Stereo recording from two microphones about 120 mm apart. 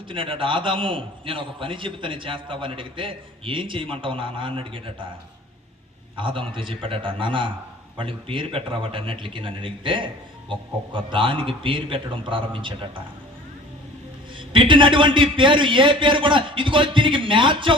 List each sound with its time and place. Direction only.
0.1 s a man's voice: 45° right (ahead or behind)
6.1 s a man's voice: 45° right (ahead or behind)
14.3 s a man's voice: 45° right (ahead or behind)